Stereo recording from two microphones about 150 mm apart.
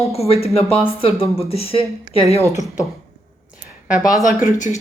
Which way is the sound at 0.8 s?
40° left (ahead or behind).